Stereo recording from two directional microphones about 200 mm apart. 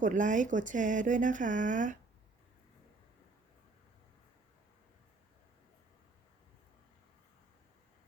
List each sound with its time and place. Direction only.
0.0 s speech: 40° right (ahead or behind)